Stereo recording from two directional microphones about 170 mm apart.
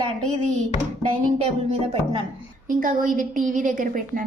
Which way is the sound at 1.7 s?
35° right (ahead or behind).